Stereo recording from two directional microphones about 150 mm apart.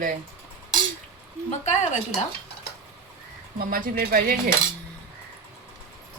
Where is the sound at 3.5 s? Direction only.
75° right (ahead or behind).